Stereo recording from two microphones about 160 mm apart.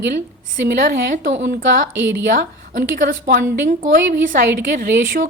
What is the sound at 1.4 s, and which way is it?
A woman's voice, 70° right (ahead or behind).